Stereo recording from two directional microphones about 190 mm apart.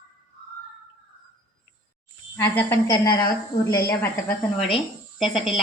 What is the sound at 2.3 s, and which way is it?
A woman's voice, 10° left (ahead or behind).